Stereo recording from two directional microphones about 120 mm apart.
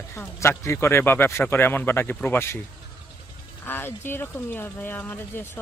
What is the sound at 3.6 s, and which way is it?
Speech, 20° left (ahead or behind).